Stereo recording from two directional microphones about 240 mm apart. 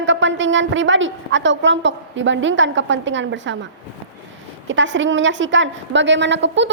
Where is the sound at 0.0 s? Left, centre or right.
Right.